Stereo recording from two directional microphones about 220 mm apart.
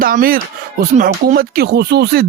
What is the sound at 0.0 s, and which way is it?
Speech, 40° right (ahead or behind).